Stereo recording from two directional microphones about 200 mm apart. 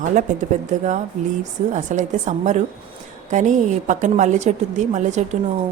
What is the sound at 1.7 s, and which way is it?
A woman's voice, 40° right (ahead or behind).